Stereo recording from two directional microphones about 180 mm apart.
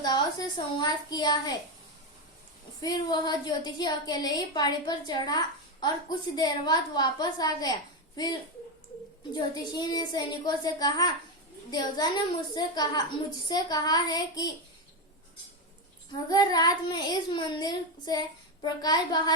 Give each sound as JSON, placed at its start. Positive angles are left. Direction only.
{"t": 0.0, "sound": "a woman's voice", "side_deg": 25}
{"t": 2.8, "sound": "a woman's voice", "side_deg": 20}
{"t": 9.3, "sound": "a woman's voice", "side_deg": 20}
{"t": 16.3, "sound": "a woman's voice", "side_deg": 20}